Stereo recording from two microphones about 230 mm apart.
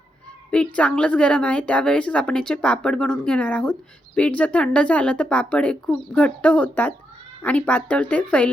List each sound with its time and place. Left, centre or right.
0.5 s a woman's voice: centre